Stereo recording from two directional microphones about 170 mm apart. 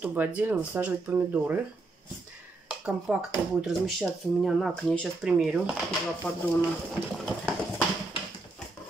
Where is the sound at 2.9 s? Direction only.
5° right (ahead or behind).